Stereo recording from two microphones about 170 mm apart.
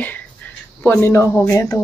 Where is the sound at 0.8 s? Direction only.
15° left (ahead or behind).